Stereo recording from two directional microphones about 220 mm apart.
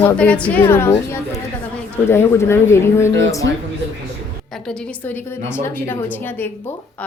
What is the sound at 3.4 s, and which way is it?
Speech, 55° right (ahead or behind).